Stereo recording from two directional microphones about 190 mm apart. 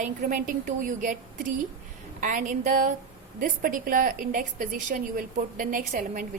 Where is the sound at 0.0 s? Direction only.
45° right (ahead or behind).